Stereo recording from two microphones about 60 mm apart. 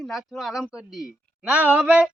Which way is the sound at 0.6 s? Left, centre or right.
Centre.